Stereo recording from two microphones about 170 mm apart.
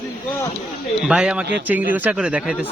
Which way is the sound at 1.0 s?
5° right (ahead or behind).